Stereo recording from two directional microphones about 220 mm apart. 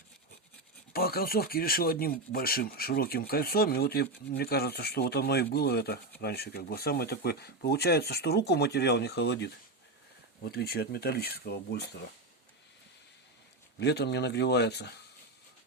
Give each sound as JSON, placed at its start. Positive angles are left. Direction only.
{"t": 0.9, "sound": "speech", "side_deg": 45}
{"t": 13.7, "sound": "speech", "side_deg": 50}